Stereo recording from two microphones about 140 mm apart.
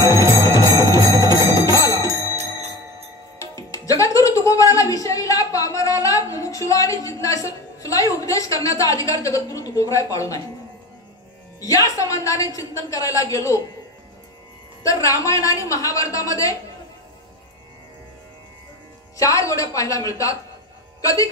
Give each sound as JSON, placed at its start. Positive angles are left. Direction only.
{"t": 0.0, "sound": "jingle bell", "side_deg": 20}
{"t": 3.3, "sound": "music", "side_deg": 25}
{"t": 11.6, "sound": "speech", "side_deg": 25}
{"t": 14.8, "sound": "speech", "side_deg": 25}
{"t": 19.1, "sound": "speech", "side_deg": 25}